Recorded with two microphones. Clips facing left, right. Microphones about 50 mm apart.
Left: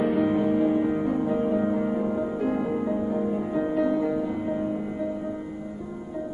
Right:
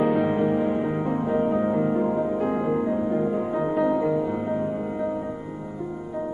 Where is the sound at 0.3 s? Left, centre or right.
Centre.